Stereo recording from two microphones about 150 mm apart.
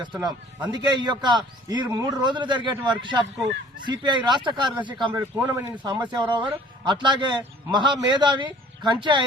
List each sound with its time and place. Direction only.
0.0 s a man's voice: 30° right (ahead or behind)
5.4 s speech: 10° right (ahead or behind)
6.1 s a man's voice: 30° right (ahead or behind)